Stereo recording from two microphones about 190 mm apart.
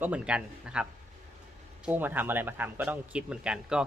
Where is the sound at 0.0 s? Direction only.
5° right (ahead or behind).